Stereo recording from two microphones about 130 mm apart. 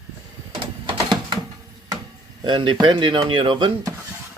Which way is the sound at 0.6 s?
35° right (ahead or behind).